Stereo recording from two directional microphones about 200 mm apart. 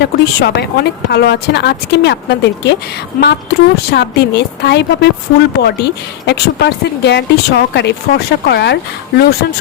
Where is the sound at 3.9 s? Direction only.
55° left (ahead or behind).